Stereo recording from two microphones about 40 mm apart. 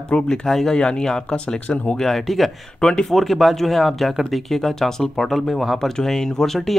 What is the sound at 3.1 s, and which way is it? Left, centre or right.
Speech, centre.